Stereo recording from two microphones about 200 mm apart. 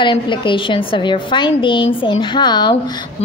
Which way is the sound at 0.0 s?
25° left (ahead or behind).